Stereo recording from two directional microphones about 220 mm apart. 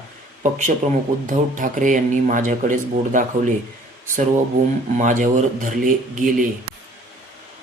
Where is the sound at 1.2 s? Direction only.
35° right (ahead or behind).